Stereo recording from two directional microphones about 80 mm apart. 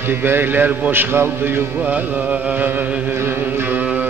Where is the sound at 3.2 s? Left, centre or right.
Right.